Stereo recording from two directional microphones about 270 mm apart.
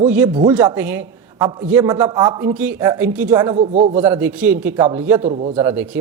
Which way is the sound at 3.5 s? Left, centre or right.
Right.